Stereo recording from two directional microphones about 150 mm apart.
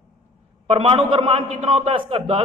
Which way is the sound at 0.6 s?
40° right (ahead or behind).